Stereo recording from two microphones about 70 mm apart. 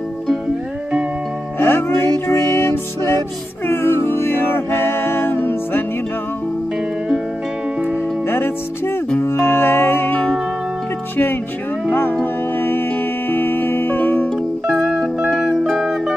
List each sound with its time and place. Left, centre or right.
1.6 s music: left
8.3 s music: left
11.9 s music: left
14.9 s music: centre
15.3 s zither: centre
15.8 s music: centre